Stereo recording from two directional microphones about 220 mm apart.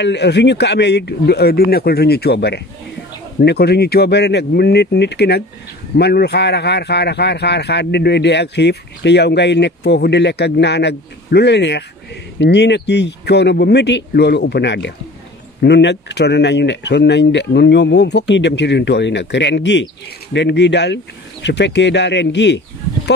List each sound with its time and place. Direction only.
0.0 s speech: 50° left (ahead or behind)